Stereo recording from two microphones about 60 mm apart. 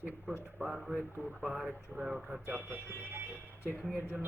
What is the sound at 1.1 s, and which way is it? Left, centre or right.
Speech, right.